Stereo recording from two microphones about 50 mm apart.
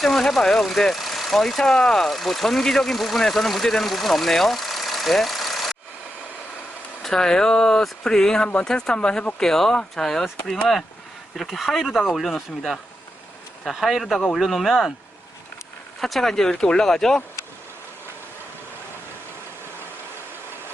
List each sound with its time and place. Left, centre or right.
0.0 s speech: centre
7.0 s speech: centre
11.5 s speech: centre
16.0 s speech: centre